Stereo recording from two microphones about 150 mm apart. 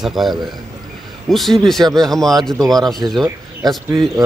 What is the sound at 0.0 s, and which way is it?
Speech, centre (ahead or behind).